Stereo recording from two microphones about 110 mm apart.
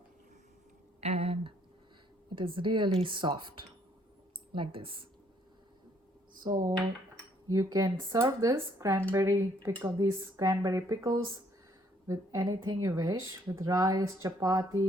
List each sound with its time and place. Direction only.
1.0 s a sound: 65° right (ahead or behind)
2.3 s speech: 50° right (ahead or behind)
6.4 s speech: 35° right (ahead or behind)